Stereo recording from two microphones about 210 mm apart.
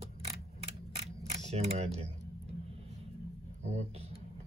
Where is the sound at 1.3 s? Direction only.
30° right (ahead or behind).